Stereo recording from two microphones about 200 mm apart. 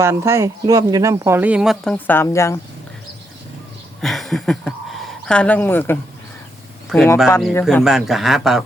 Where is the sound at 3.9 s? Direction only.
Centre (ahead or behind).